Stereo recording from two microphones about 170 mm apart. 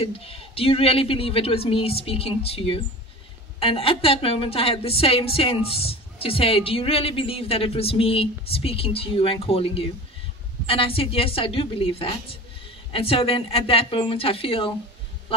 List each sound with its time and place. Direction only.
0.0 s a woman's voice: 35° left (ahead or behind)